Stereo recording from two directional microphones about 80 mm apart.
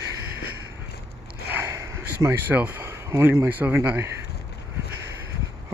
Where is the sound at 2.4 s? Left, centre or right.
Right.